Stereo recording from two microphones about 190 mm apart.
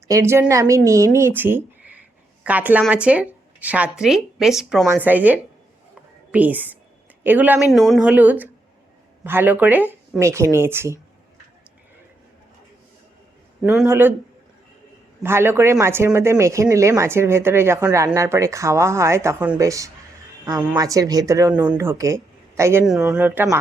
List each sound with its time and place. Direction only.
0.1 s speech: 15° right (ahead or behind)
1.4 s a sound: 10° right (ahead or behind)
2.8 s speech: 5° right (ahead or behind)
5.9 s a sound: 10° right (ahead or behind)
7.3 s speech: 10° right (ahead or behind)
13.8 s speech: 15° right (ahead or behind)
15.2 s speech: 10° right (ahead or behind)
22.9 s speech: centre (ahead or behind)